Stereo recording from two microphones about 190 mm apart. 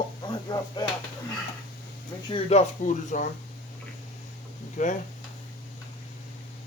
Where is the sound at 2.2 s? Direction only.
30° left (ahead or behind).